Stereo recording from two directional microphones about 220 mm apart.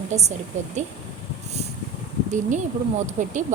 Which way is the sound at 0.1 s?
30° right (ahead or behind).